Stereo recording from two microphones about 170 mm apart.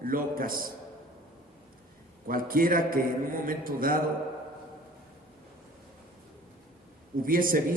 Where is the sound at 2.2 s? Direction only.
55° right (ahead or behind).